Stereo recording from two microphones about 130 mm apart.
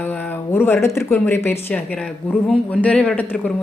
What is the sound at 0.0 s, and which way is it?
Speech, 15° left (ahead or behind).